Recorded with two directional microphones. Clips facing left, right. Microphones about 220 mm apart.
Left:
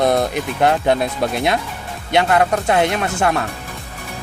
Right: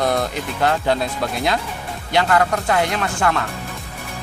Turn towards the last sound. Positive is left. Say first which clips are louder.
# left 2 dB
turn(degrees=25)  # may be behind; listen again after turning